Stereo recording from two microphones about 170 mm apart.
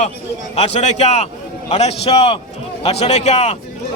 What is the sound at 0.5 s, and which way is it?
A man's voice, 40° left (ahead or behind).